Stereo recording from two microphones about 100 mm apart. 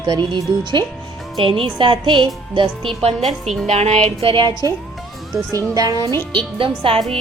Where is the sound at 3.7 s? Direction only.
90° right.